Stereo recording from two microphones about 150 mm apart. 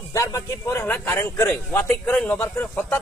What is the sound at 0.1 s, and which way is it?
A man's voice, 20° left (ahead or behind).